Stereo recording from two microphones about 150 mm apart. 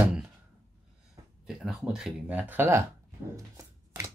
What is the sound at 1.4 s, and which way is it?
Speech, centre (ahead or behind).